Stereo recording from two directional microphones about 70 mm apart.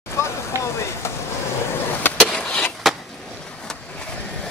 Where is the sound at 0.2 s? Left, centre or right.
Left.